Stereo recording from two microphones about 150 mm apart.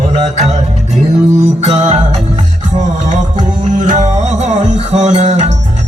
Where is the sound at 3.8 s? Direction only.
55° right (ahead or behind).